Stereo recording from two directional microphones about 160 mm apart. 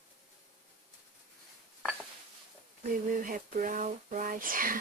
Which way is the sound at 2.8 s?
60° right (ahead or behind).